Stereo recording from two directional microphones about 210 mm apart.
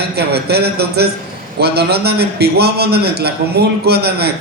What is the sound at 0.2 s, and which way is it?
A man's voice, 50° right (ahead or behind).